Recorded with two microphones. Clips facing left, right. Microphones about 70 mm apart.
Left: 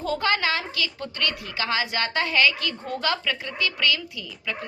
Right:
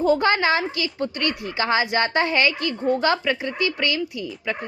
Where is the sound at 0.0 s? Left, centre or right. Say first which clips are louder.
Right 6 dB; right.